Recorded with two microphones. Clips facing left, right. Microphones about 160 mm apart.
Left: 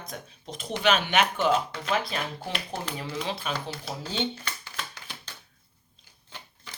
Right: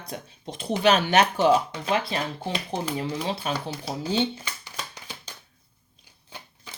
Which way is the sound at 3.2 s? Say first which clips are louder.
Right 3 dB; 35° right (ahead or behind).